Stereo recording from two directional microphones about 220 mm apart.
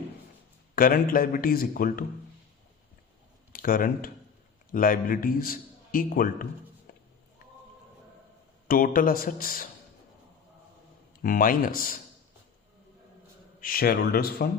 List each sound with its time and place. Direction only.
0.8 s a man's voice: 40° left (ahead or behind)
3.5 s a man's voice: 40° left (ahead or behind)
8.6 s a man's voice: 40° left (ahead or behind)
11.2 s a man's voice: 40° left (ahead or behind)
13.6 s speech: 40° left (ahead or behind)